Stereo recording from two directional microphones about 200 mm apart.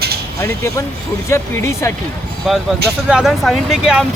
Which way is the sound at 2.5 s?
Centre (ahead or behind).